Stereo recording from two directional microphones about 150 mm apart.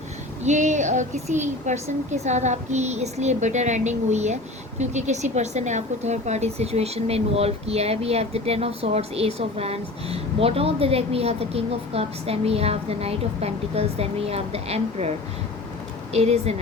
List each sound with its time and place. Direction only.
0.4 s a woman's voice: 55° right (ahead or behind)
16.1 s a woman's voice: 45° right (ahead or behind)